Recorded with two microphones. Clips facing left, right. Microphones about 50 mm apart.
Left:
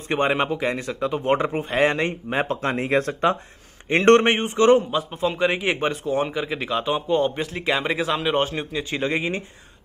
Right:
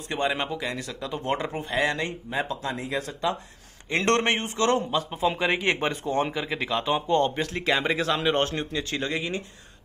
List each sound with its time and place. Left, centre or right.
0.1 s speech: left
2.2 s speech: left
3.9 s speech: left
4.9 s a man's voice: centre
8.9 s speech: left